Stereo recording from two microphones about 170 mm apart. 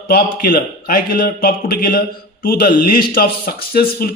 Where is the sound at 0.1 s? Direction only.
65° left (ahead or behind).